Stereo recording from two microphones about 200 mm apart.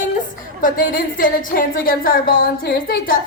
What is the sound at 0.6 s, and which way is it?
Speech, 45° left (ahead or behind).